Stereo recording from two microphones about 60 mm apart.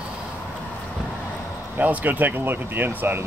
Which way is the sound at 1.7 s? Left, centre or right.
Right.